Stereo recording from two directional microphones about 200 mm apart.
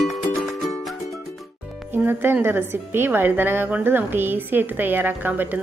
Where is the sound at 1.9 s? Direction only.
10° right (ahead or behind).